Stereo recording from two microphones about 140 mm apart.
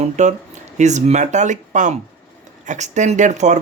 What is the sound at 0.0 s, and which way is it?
Speech, 60° right (ahead or behind).